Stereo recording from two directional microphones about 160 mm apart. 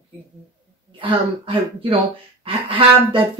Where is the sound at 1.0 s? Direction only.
35° right (ahead or behind).